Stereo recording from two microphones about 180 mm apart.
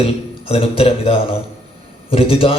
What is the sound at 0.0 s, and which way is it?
Speech, 35° left (ahead or behind).